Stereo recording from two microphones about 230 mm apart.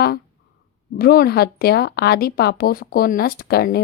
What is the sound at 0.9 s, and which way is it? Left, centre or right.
A woman's voice, left.